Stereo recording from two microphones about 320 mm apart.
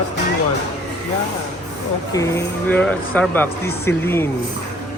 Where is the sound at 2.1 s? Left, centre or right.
Centre.